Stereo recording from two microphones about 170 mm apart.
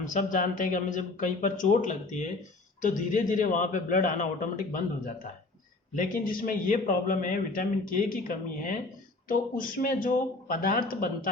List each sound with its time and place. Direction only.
0.0 s a man's voice: 45° left (ahead or behind)